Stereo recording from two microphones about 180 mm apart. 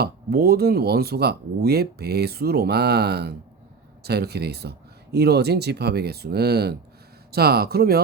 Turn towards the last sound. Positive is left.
turn(degrees=-60)  # may be behind; listen again after turning